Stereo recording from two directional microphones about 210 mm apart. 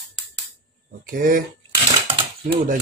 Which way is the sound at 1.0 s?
45° right (ahead or behind).